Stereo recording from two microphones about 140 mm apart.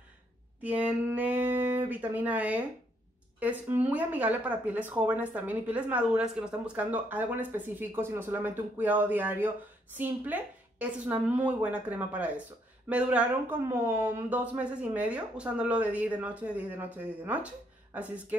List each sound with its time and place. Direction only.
0.6 s a woman's voice: 10° right (ahead or behind)